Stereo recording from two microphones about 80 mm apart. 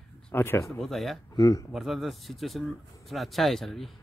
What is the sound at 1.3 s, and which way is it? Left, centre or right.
Speech, left.